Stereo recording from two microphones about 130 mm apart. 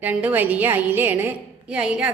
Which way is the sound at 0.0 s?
15° right (ahead or behind).